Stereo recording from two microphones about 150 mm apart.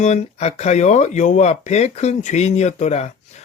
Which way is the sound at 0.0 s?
50° left (ahead or behind).